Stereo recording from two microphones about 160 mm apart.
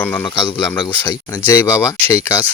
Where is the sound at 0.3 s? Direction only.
30° left (ahead or behind).